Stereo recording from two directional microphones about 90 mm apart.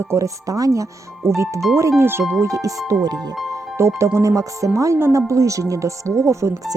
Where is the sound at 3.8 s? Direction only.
30° right (ahead or behind).